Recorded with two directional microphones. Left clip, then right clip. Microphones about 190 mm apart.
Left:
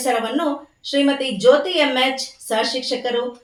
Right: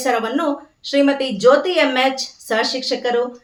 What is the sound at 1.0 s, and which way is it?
A woman's voice, 15° right (ahead or behind).